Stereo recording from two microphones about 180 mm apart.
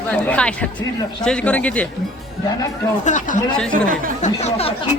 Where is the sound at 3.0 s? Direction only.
45° left (ahead or behind).